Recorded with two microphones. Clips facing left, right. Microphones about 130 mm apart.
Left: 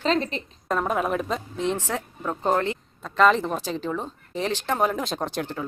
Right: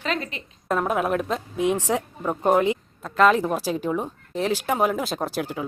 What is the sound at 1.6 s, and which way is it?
Speech, 15° right (ahead or behind).